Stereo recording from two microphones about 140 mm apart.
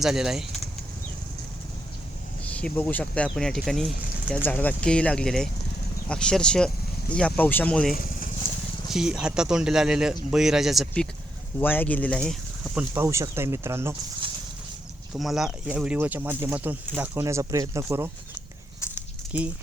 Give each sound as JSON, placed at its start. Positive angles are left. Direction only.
{"t": 0.0, "sound": "speech", "side_deg": -5}
{"t": 2.4, "sound": "speech", "side_deg": 10}
{"t": 4.4, "sound": "speech", "side_deg": 15}
{"t": 7.9, "sound": "a sound", "side_deg": 85}
{"t": 8.9, "sound": "speech", "side_deg": -5}
{"t": 11.6, "sound": "speech", "side_deg": 15}
{"t": 12.3, "sound": "a sound", "side_deg": 0}
{"t": 12.9, "sound": "speech", "side_deg": -20}
{"t": 15.1, "sound": "speech", "side_deg": 0}
{"t": 19.3, "sound": "speech", "side_deg": -10}